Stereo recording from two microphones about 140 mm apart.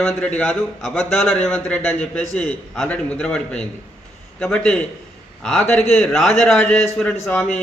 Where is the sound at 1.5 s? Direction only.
10° left (ahead or behind).